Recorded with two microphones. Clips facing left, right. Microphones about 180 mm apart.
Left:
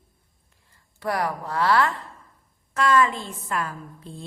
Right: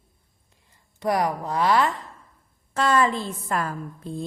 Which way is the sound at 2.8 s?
30° right (ahead or behind).